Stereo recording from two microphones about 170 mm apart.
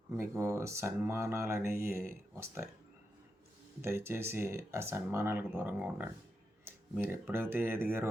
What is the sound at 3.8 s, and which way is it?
Speech, 15° right (ahead or behind).